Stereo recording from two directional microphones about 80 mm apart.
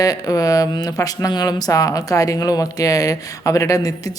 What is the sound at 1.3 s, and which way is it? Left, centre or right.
Speech, left.